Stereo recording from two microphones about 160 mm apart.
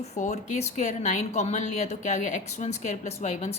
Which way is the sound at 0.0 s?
45° left (ahead or behind).